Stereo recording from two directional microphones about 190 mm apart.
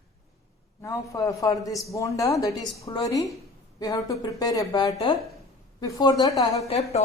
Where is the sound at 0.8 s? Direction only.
15° left (ahead or behind).